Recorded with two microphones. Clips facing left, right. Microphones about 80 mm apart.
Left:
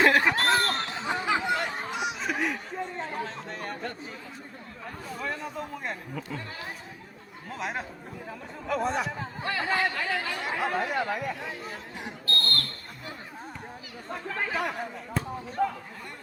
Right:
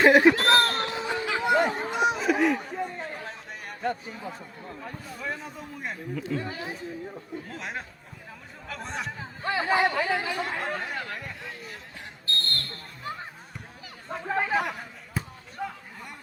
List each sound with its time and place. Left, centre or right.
0.1 s speech: centre
0.3 s a sound: centre
0.8 s a sound: centre
1.0 s chatter: centre
1.7 s a sound: centre
3.2 s chatter: centre
4.9 s speech: centre
9.5 s speech: centre
10.4 s speech: centre
12.2 s basketball bounce: right
14.3 s speech: centre